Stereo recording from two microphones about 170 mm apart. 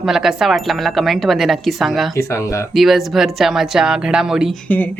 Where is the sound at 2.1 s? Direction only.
15° left (ahead or behind).